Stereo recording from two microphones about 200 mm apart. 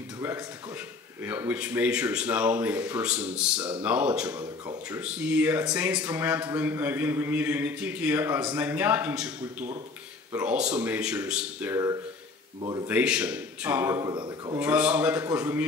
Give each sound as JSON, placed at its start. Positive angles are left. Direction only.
{"t": 0.2, "sound": "a man's voice", "side_deg": -15}
{"t": 4.3, "sound": "speech", "side_deg": -20}
{"t": 4.8, "sound": "a man's voice", "side_deg": -5}
{"t": 12.8, "sound": "a man's voice", "side_deg": -5}
{"t": 14.6, "sound": "a man's voice", "side_deg": -5}